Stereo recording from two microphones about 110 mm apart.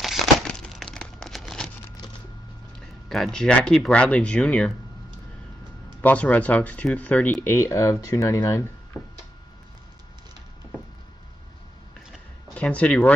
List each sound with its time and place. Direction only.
0.0 s crumpling: 5° left (ahead or behind)
3.1 s speech: 5° left (ahead or behind)
5.9 s speech: 15° left (ahead or behind)
7.4 s speech: 25° left (ahead or behind)
12.5 s speech: 10° left (ahead or behind)